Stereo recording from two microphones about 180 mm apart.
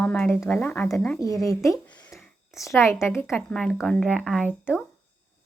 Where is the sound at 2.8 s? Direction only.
15° left (ahead or behind).